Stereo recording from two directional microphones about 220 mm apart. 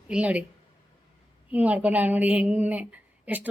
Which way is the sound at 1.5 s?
5° right (ahead or behind).